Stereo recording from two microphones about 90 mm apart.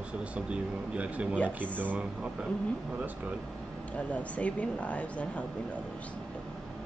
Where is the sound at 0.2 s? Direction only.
15° right (ahead or behind).